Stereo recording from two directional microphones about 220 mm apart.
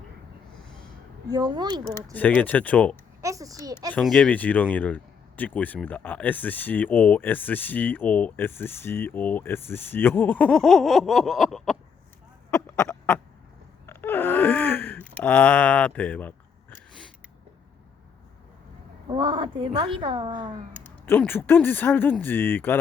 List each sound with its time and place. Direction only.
1.3 s a woman's voice: 20° right (ahead or behind)
2.1 s speech: 5° left (ahead or behind)
3.2 s a child's voice: 15° right (ahead or behind)
3.9 s speech: 5° left (ahead or behind)
12.5 s a sound: 15° left (ahead or behind)
13.8 s gasp: 10° left (ahead or behind)
19.0 s a woman's voice: 20° right (ahead or behind)
20.7 s speech: 10° left (ahead or behind)